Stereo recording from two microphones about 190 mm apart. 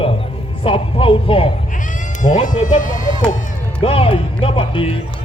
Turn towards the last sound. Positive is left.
turn(degrees=25)  # may be behind; listen again after turning